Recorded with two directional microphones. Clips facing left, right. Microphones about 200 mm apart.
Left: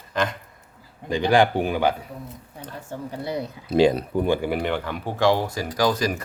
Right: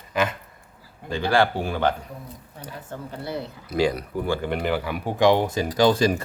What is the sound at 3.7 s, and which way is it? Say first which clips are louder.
Speech: left 5 dB; 25° left (ahead or behind).